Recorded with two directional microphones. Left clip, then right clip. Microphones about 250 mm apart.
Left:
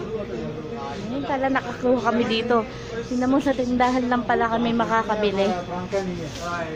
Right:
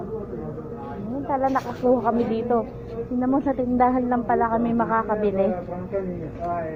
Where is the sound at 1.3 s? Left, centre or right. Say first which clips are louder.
Right 1 dB; left.